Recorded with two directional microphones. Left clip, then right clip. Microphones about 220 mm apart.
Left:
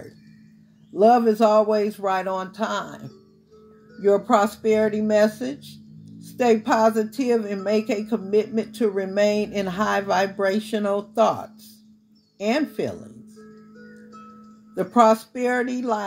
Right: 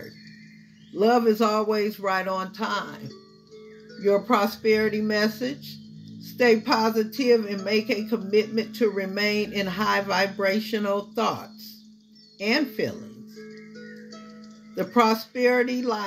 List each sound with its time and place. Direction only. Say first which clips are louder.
0.9 s a woman's voice: left 4 dB; 45° left (ahead or behind)
4.0 s a woman's voice: left 3 dB; 50° left (ahead or behind)
12.4 s a woman's voice: left 1 dB; 45° left (ahead or behind)
14.8 s a woman's voice: left 5 dB; 45° left (ahead or behind)